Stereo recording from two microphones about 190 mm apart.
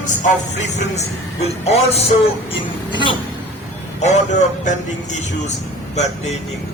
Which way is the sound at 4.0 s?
35° left (ahead or behind).